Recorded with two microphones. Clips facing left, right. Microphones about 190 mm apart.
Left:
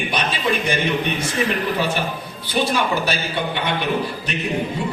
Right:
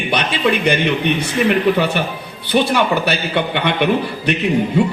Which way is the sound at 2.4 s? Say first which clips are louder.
Right 5 dB; 65° right (ahead or behind).